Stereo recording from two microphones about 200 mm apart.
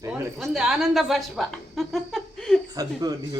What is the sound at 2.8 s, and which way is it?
Speech, 20° right (ahead or behind).